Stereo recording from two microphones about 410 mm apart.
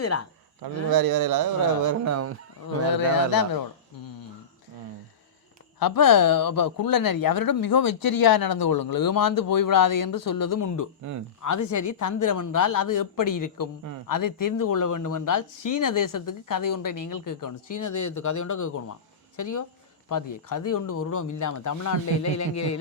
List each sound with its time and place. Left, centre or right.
0.0 s speech: left
0.6 s a man's voice: right
2.9 s a man's voice: left
3.9 s a sound: left
5.8 s speech: left